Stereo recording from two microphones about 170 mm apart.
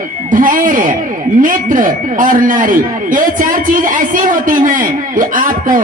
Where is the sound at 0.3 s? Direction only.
50° right (ahead or behind).